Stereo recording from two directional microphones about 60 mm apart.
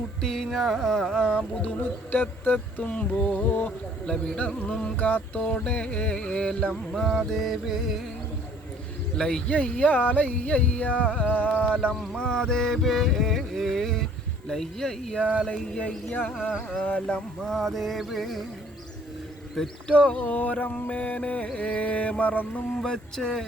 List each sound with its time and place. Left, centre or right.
0.2 s music: centre
2.1 s speech: left
4.0 s music: centre
4.9 s speech: left
5.4 s music: centre
9.1 s music: centre
9.5 s speech: left
12.1 s music: centre
15.7 s speech: centre
17.2 s music: centre
19.5 s speech: centre
22.7 s music: centre